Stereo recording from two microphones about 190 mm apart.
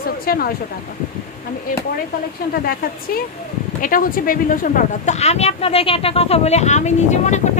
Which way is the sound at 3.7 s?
45° left (ahead or behind).